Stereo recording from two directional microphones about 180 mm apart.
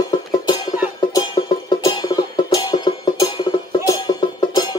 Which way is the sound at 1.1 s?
25° left (ahead or behind).